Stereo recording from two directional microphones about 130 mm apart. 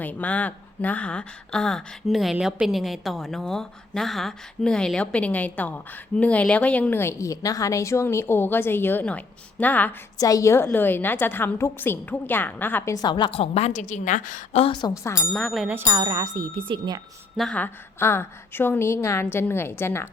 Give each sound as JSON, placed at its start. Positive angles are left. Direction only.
{"t": 0.0, "sound": "speech", "side_deg": 10}
{"t": 10.2, "sound": "a woman's voice", "side_deg": 25}
{"t": 14.5, "sound": "a woman's voice", "side_deg": 45}
{"t": 14.8, "sound": "speech", "side_deg": 30}
{"t": 15.3, "sound": "speech", "side_deg": 5}
{"t": 15.9, "sound": "speech", "side_deg": -30}
{"t": 17.3, "sound": "speech", "side_deg": 0}
{"t": 17.6, "sound": "a woman's voice", "side_deg": 20}